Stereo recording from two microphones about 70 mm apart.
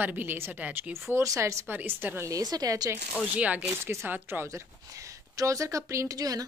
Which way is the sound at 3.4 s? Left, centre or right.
Centre.